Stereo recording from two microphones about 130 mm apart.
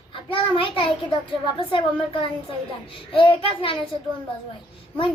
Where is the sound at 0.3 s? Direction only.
40° left (ahead or behind).